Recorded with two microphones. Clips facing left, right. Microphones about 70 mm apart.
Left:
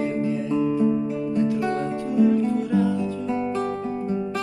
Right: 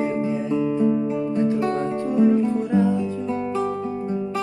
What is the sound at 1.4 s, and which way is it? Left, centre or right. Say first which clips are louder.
Music: right 1 dB; right.